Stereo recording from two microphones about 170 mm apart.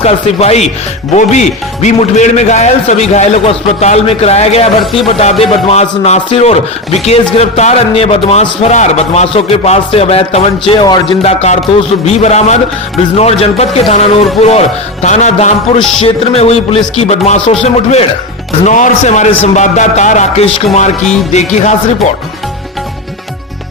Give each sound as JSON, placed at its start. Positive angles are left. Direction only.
{"t": 0.0, "sound": "speech", "side_deg": 40}
{"t": 4.8, "sound": "speech", "side_deg": 0}
{"t": 5.2, "sound": "speech", "side_deg": 40}
{"t": 11.2, "sound": "speech", "side_deg": 40}